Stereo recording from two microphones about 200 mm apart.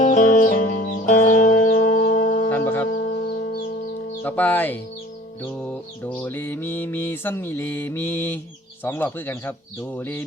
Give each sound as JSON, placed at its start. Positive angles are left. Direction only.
{"t": 0.0, "sound": "music", "side_deg": 40}
{"t": 2.5, "sound": "music", "side_deg": 10}
{"t": 2.9, "sound": "music", "side_deg": 40}
{"t": 4.2, "sound": "mantra", "side_deg": 10}
{"t": 6.1, "sound": "mantra", "side_deg": 5}